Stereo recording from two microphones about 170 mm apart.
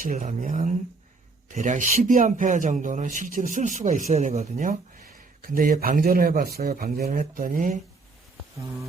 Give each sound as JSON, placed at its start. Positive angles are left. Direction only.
{"t": 0.0, "sound": "a man's voice", "side_deg": -50}
{"t": 7.0, "sound": "a man's voice", "side_deg": -50}